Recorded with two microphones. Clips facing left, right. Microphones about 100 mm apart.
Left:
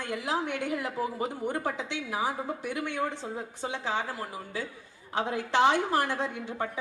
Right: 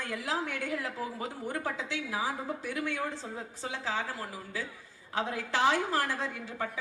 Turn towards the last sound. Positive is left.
turn(degrees=20)  # may be behind; listen again after turning